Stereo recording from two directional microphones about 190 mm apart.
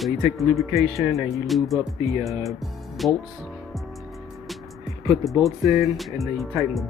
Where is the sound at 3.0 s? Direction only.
Centre (ahead or behind).